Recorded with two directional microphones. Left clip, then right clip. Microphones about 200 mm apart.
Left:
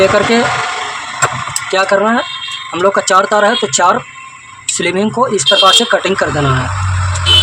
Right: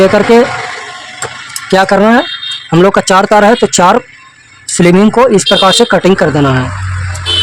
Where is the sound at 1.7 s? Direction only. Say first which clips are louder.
Right 5 dB; 55° right (ahead or behind).